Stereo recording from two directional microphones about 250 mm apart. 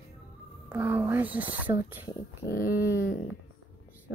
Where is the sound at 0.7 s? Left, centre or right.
Centre.